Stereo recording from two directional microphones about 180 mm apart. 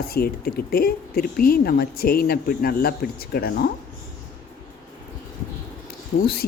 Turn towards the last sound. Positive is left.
turn(degrees=60)  # may be behind; listen again after turning